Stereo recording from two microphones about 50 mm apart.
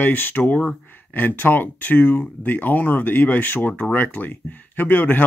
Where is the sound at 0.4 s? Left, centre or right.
Left.